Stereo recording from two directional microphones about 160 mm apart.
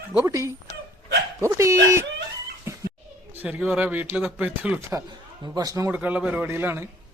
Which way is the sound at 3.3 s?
10° right (ahead or behind).